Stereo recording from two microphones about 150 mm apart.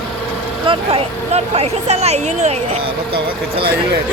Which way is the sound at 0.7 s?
45° right (ahead or behind).